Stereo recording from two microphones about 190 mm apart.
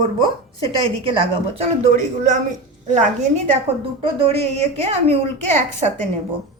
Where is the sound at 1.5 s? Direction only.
35° right (ahead or behind).